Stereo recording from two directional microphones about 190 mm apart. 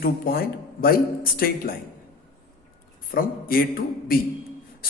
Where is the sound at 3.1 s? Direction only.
50° left (ahead or behind).